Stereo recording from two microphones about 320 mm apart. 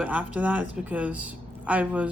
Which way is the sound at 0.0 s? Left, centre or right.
Centre.